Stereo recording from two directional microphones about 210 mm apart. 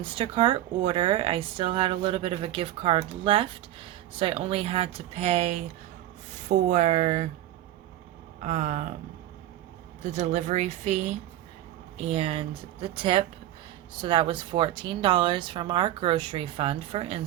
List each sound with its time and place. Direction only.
0.0 s speech: 25° right (ahead or behind)
8.4 s speech: 35° right (ahead or behind)
10.0 s speech: 35° right (ahead or behind)